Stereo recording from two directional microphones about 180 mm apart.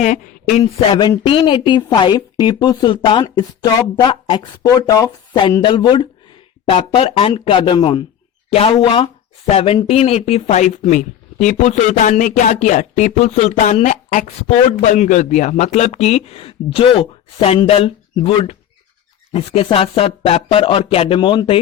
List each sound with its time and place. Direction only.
0.0 s speech: 40° left (ahead or behind)